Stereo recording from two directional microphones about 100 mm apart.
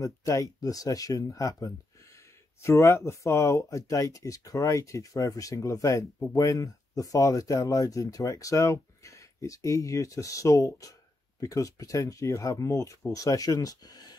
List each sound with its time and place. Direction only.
0.0 s speech: 35° left (ahead or behind)